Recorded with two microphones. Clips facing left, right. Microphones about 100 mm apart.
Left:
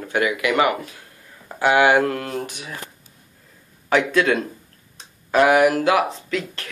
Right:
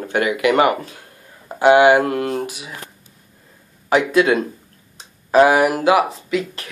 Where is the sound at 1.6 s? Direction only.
20° right (ahead or behind).